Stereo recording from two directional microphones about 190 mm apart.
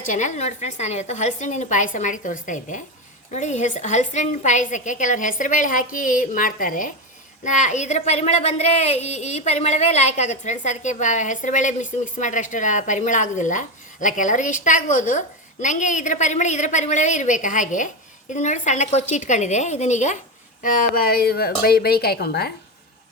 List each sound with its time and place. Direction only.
0.1 s a woman's voice: 40° left (ahead or behind); by 22.5 s 55° left (ahead or behind)